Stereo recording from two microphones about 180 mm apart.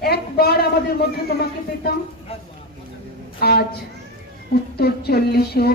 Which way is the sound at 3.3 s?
60° left (ahead or behind).